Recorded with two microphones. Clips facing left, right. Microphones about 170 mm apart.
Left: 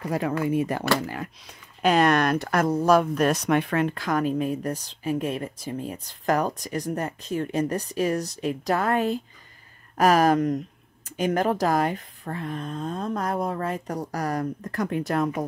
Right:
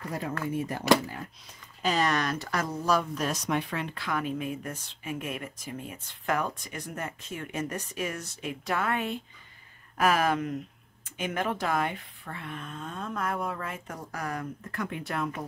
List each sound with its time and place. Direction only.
0.5 s speech: 75° left (ahead or behind); by 15.4 s 40° left (ahead or behind)